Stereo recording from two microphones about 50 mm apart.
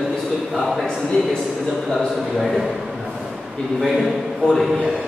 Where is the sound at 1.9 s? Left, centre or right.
Centre.